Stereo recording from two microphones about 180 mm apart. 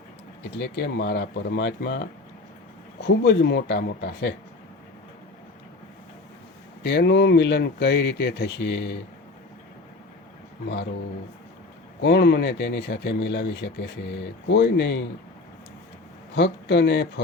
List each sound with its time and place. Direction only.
0.6 s speech: 70° left (ahead or behind)
6.8 s speech: 65° left (ahead or behind)
11.9 s speech: 70° left (ahead or behind)
16.3 s speech: 75° left (ahead or behind)